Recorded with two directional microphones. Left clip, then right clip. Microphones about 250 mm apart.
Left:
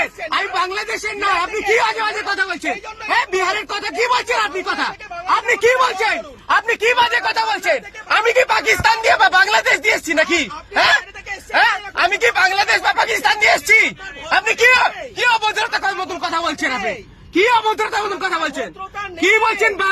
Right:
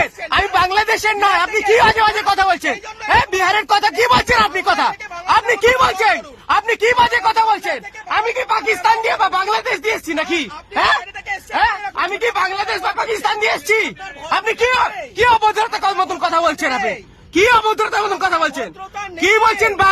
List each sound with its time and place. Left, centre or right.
0.2 s speech: right
8.2 s speech: centre; by 19.9 s right